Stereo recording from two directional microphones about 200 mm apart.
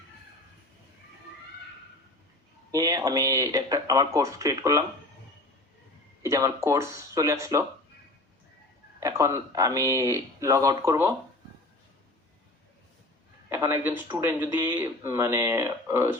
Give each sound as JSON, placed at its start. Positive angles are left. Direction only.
{"t": 2.7, "sound": "speech", "side_deg": -20}
{"t": 6.2, "sound": "speech", "side_deg": -15}
{"t": 9.0, "sound": "speech", "side_deg": -15}
{"t": 13.5, "sound": "speech", "side_deg": -10}